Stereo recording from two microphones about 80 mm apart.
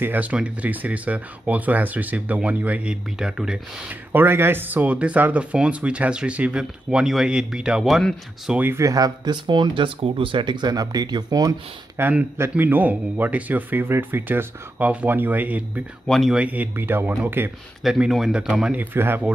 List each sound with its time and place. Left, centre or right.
0.0 s speech: right
4.1 s speech: right; by 8.0 s centre
8.7 s speech: right
10.7 s speech: right
12.0 s speech: centre
16.1 s speech: centre
16.3 s speech: centre
17.8 s speech: centre
18.9 s speech: right